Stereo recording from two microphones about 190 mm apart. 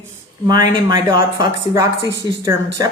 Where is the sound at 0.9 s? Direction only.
25° right (ahead or behind).